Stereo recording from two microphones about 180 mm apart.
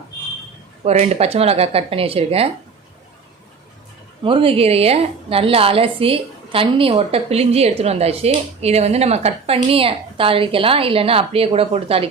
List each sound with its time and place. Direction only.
0.9 s a woman's voice: 35° right (ahead or behind)
4.2 s a woman's voice: 30° right (ahead or behind)